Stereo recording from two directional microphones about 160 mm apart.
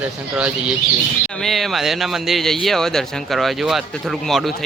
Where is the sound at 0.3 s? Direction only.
5° right (ahead or behind).